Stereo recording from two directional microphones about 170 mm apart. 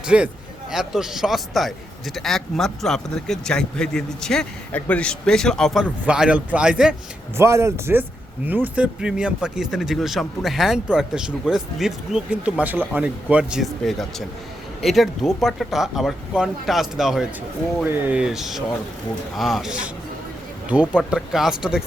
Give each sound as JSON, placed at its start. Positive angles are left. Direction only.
{"t": 0.0, "sound": "a man's voice", "side_deg": -5}
{"t": 7.3, "sound": "speech", "side_deg": -15}
{"t": 21.0, "sound": "speech", "side_deg": 0}